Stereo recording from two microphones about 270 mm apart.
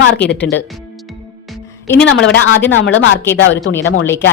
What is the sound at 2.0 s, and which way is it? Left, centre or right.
Speech, left.